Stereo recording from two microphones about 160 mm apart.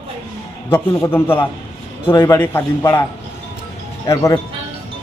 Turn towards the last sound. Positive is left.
turn(degrees=20)  # may be behind; listen again after turning